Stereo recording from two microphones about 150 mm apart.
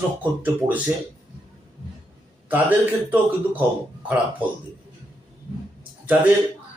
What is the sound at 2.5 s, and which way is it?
Speech, 10° right (ahead or behind).